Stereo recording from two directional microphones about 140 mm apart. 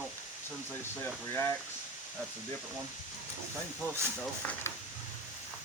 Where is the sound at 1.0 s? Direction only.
15° left (ahead or behind).